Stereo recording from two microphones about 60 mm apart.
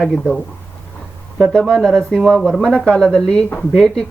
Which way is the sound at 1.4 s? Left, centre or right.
Centre.